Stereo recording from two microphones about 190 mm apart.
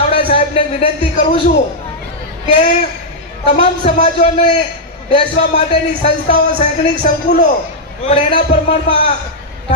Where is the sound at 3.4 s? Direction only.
35° left (ahead or behind).